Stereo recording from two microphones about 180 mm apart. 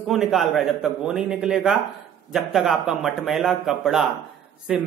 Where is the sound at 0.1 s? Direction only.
Centre (ahead or behind).